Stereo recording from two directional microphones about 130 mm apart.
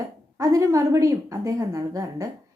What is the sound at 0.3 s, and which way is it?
A woman's voice, 25° right (ahead or behind).